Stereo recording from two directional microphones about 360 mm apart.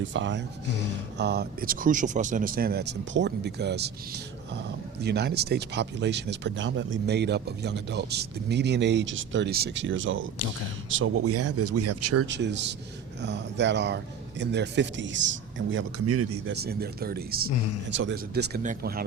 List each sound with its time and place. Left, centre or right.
0.0 s speech: right
16.6 s speech: right